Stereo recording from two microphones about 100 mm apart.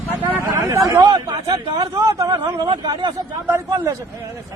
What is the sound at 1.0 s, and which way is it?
A man's voice, 45° right (ahead or behind).